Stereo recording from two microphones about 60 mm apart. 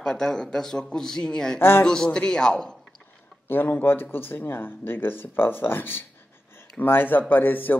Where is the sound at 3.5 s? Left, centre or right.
Left.